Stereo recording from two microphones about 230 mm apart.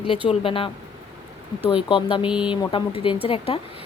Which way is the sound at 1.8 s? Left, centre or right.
Left.